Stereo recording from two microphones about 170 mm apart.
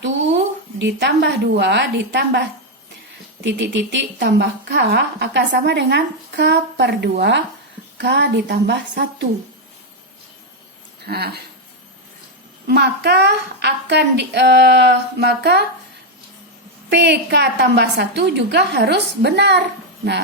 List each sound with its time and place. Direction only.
0.8 s a woman's voice: 90° right
11.0 s speech: 70° right (ahead or behind)
12.6 s a woman's voice: 75° right (ahead or behind)
16.9 s a woman's voice: 85° right